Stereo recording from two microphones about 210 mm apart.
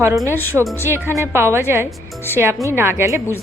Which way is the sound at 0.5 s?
5° right (ahead or behind).